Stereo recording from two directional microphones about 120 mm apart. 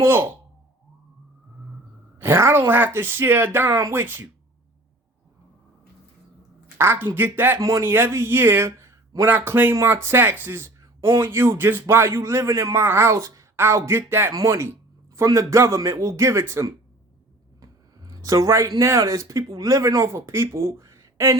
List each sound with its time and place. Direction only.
0.0 s speech: 20° right (ahead or behind)
2.1 s speech: 20° right (ahead or behind)
6.7 s speech: 20° right (ahead or behind)